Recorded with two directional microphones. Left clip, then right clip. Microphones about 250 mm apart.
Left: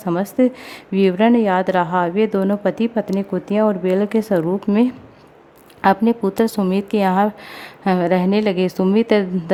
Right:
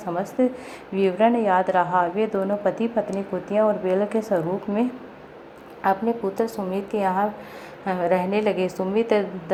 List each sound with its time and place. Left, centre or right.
0.1 s a woman's voice: left